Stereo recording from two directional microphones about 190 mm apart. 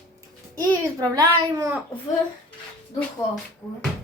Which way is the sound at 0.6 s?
20° right (ahead or behind).